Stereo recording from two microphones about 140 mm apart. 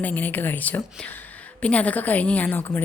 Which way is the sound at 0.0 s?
10° left (ahead or behind).